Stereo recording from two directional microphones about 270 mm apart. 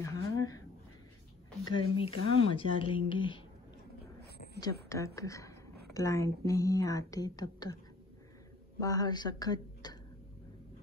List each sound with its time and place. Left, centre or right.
0.0 s a sound: centre
1.7 s speech: centre
4.6 s a woman's voice: centre
8.7 s speech: centre